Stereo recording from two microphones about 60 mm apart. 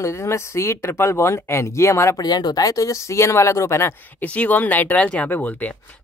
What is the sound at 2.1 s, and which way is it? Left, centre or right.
Speech, left.